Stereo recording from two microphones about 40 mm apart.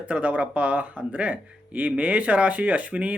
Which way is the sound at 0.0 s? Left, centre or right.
Right.